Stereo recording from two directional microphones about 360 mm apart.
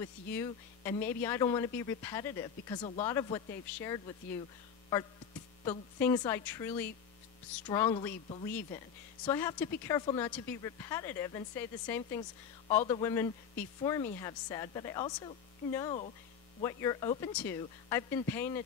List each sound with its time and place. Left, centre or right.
0.0 s speech: centre
5.7 s speech: centre